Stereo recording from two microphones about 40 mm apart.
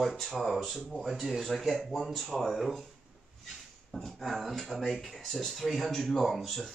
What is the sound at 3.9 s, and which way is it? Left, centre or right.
Speech, centre.